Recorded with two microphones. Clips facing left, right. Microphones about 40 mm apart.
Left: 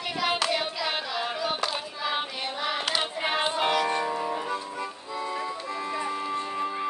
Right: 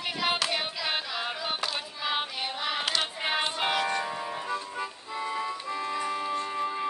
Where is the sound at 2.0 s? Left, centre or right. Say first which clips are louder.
Even; centre.